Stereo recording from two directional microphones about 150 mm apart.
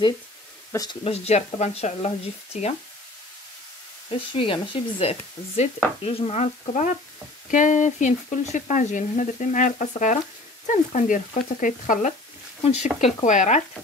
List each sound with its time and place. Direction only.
1.0 s speech: 40° left (ahead or behind)
4.3 s speech: 35° left (ahead or behind); by 13.6 s 55° left (ahead or behind)